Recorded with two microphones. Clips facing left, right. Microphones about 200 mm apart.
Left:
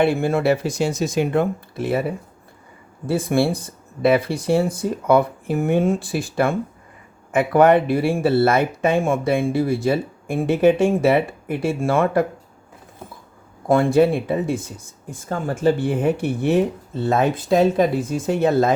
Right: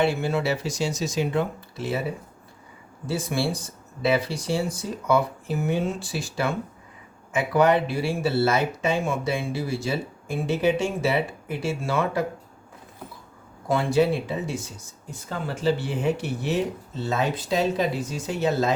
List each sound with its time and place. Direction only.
0.0 s speech: 55° left (ahead or behind)
13.7 s speech: 50° left (ahead or behind)